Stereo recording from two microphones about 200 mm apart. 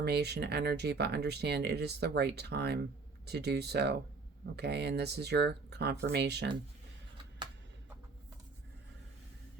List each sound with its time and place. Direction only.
0.0 s speech: 55° right (ahead or behind)